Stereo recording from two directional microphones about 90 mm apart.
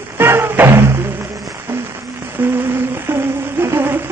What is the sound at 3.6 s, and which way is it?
Humming, 25° right (ahead or behind).